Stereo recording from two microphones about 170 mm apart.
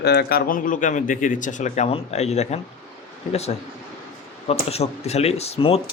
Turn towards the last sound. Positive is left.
turn(degrees=35)  # may be behind; listen again after turning